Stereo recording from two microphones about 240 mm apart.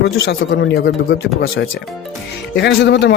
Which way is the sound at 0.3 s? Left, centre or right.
Left.